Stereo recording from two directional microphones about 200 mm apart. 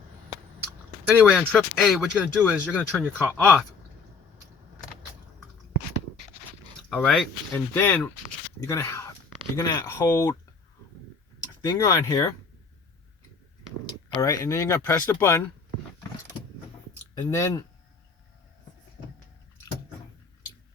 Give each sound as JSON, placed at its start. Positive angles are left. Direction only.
{"t": 1.3, "sound": "speech", "side_deg": 5}
{"t": 2.7, "sound": "speech", "side_deg": 5}
{"t": 6.9, "sound": "speech", "side_deg": 0}
{"t": 11.6, "sound": "speech", "side_deg": 20}
{"t": 14.2, "sound": "speech", "side_deg": 15}
{"t": 17.2, "sound": "speech", "side_deg": 15}